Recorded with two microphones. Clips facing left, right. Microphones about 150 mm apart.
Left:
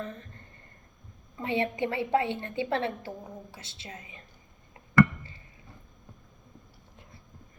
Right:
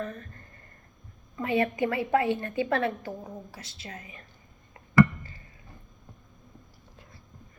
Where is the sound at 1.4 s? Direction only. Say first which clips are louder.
Right 3 dB; 25° left (ahead or behind).